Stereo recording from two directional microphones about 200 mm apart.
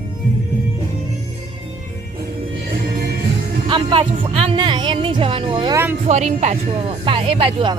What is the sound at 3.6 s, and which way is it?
Speech, 25° right (ahead or behind).